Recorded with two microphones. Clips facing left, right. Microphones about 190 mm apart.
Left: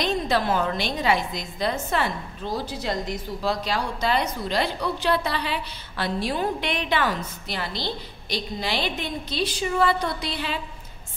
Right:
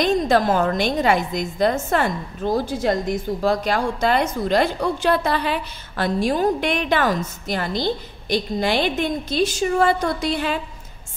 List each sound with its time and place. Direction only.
0.0 s a woman's voice: 45° right (ahead or behind)